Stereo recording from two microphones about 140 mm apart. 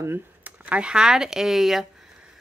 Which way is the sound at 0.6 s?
10° right (ahead or behind).